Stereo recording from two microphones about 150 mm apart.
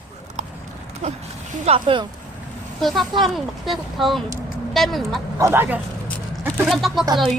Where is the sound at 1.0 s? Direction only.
45° right (ahead or behind).